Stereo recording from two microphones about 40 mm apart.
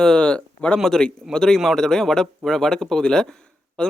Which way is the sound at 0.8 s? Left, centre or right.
Centre.